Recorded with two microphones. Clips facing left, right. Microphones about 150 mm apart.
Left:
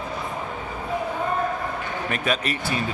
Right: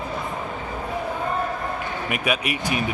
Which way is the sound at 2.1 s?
10° right (ahead or behind).